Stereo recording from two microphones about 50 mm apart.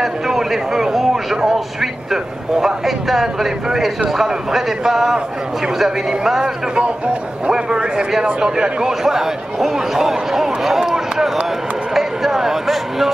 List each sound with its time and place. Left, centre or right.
0.0 s a man's voice: centre
9.0 s a man's voice: centre
11.9 s a sound: centre